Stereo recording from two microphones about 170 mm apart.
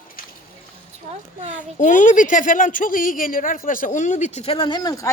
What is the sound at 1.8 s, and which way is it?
A woman's voice, 50° left (ahead or behind).